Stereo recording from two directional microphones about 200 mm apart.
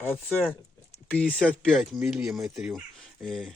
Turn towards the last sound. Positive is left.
turn(degrees=0)  # may be behind; listen again after turning